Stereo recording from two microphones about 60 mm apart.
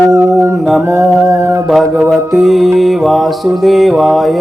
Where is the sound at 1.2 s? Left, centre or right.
Right.